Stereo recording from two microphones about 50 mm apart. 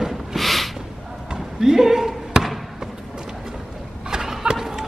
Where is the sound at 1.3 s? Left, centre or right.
Centre.